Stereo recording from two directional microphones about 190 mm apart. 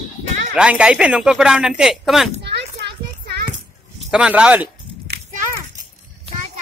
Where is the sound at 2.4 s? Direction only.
60° right (ahead or behind).